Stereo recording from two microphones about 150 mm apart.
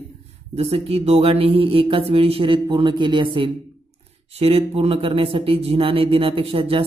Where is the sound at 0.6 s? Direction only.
40° right (ahead or behind).